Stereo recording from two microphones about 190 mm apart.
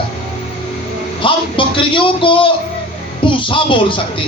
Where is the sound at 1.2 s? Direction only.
25° left (ahead or behind).